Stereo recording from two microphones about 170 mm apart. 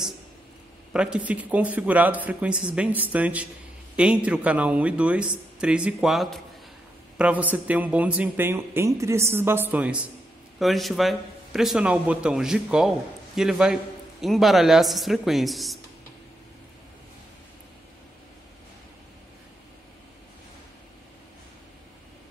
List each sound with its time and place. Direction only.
0.9 s a man's voice: 5° right (ahead or behind)